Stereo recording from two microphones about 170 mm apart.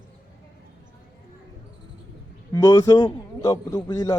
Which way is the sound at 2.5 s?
20° left (ahead or behind).